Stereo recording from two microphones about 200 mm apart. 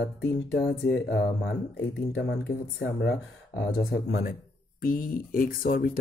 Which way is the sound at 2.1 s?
55° left (ahead or behind).